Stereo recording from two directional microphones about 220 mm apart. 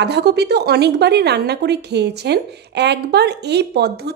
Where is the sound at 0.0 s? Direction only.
50° right (ahead or behind).